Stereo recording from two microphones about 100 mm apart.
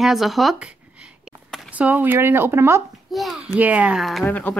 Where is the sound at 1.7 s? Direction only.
15° right (ahead or behind).